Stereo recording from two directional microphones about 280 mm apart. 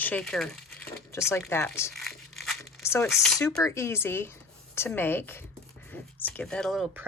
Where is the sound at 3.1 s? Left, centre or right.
Centre.